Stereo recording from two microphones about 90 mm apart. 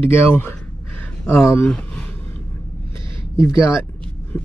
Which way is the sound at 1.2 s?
30° left (ahead or behind).